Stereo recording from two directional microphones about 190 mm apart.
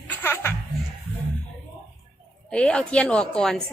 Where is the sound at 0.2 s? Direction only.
10° left (ahead or behind).